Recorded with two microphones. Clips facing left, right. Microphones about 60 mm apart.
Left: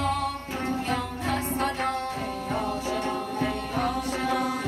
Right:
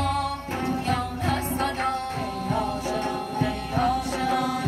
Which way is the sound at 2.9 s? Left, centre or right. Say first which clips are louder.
Right 1 dB; right.